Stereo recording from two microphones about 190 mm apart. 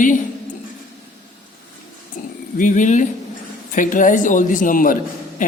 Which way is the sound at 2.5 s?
40° left (ahead or behind).